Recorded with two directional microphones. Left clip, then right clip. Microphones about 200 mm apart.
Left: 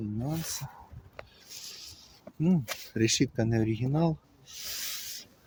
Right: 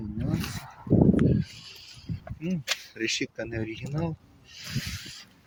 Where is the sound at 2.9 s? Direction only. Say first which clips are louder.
Left 7 dB; 25° left (ahead or behind).